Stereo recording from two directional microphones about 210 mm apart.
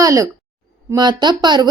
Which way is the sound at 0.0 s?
15° right (ahead or behind).